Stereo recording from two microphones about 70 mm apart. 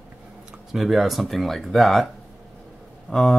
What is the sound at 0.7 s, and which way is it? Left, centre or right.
Speech, centre.